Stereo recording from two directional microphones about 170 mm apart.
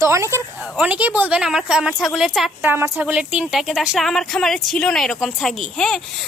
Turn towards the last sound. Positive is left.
turn(degrees=5)  # may be behind; listen again after turning